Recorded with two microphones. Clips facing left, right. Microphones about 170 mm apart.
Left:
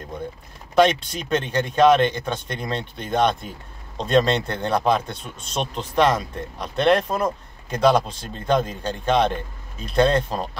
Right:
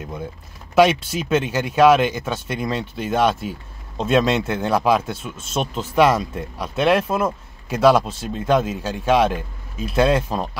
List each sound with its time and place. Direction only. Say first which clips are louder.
0.7 s speech: right 2 dB; 5° right (ahead or behind)